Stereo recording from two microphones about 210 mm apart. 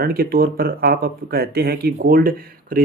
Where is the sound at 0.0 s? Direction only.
45° right (ahead or behind).